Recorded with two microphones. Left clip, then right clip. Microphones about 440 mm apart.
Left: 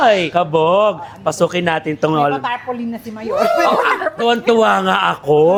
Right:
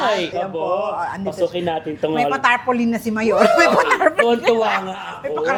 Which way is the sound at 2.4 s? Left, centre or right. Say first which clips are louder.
Right 5 dB; right.